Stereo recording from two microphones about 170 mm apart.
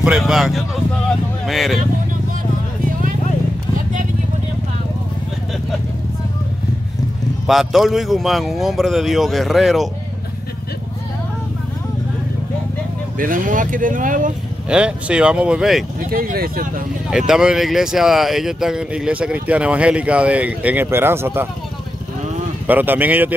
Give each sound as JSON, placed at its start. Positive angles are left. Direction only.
{"t": 0.0, "sound": "speech", "side_deg": 0}
{"t": 7.4, "sound": "speech", "side_deg": 0}
{"t": 13.2, "sound": "speech", "side_deg": -50}
{"t": 14.7, "sound": "speech", "side_deg": -5}
{"t": 16.1, "sound": "speech", "side_deg": -60}
{"t": 17.3, "sound": "speech", "side_deg": -5}
{"t": 22.7, "sound": "speech", "side_deg": -10}